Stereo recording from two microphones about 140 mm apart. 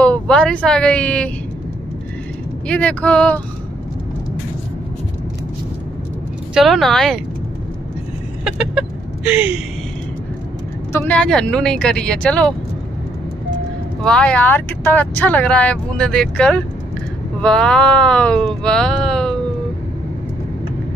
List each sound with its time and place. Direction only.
0.0 s speech: 5° left (ahead or behind)
2.7 s speech: 10° left (ahead or behind)
6.5 s speech: centre (ahead or behind)
8.5 s chicken: 5° right (ahead or behind)
10.9 s speech: 20° left (ahead or behind)
11.1 s speech: 5° left (ahead or behind)
14.0 s speech: 5° left (ahead or behind)